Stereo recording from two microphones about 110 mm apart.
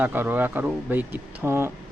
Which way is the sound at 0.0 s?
15° right (ahead or behind).